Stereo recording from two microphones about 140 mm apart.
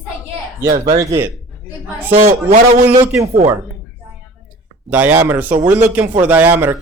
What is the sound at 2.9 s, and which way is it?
Speech, 20° right (ahead or behind).